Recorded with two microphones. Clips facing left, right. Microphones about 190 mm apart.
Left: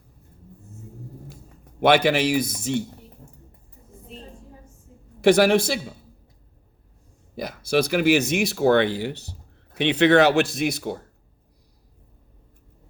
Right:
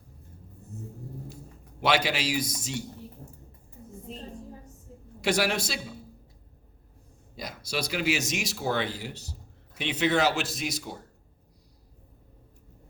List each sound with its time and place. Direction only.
1.8 s speech: 55° left (ahead or behind)
5.2 s speech: 55° left (ahead or behind)
7.3 s speech: 55° left (ahead or behind)